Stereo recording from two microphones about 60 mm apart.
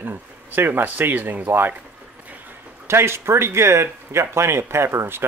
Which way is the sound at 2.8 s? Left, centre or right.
Right.